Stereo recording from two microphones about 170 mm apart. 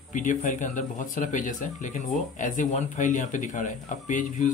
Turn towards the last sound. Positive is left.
turn(degrees=45)  # may be behind; listen again after turning